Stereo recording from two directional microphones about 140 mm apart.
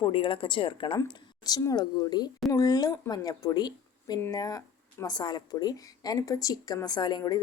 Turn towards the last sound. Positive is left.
turn(degrees=30)  # may be behind; listen again after turning